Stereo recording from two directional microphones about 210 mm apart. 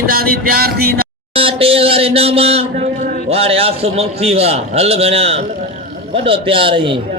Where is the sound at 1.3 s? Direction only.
25° right (ahead or behind).